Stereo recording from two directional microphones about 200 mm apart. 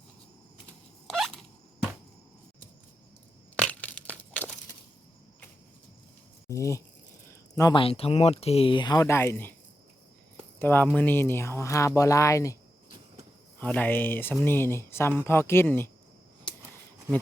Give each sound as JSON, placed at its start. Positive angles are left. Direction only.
{"t": 1.0, "sound": "a sound", "side_deg": 0}
{"t": 3.5, "sound": "crushing", "side_deg": 5}
{"t": 6.5, "sound": "speech", "side_deg": 15}
{"t": 10.6, "sound": "speech", "side_deg": 10}
{"t": 13.6, "sound": "speech", "side_deg": 10}